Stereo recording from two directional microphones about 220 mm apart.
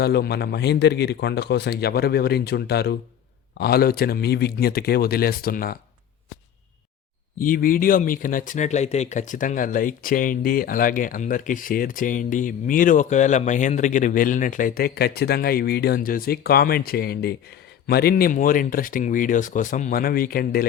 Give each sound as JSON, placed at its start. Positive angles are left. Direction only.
{"t": 0.0, "sound": "a man's voice", "side_deg": 45}
{"t": 7.3, "sound": "speech", "side_deg": 40}